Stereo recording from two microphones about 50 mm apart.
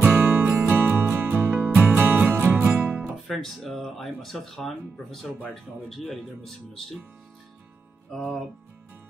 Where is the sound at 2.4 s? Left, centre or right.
Right.